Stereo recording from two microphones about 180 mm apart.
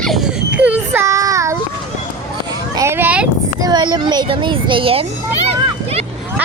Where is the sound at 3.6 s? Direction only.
25° right (ahead or behind).